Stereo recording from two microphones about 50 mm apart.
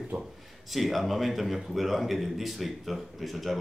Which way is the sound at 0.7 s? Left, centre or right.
Centre.